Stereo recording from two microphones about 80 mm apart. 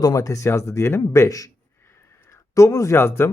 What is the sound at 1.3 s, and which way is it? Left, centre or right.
Speech, left.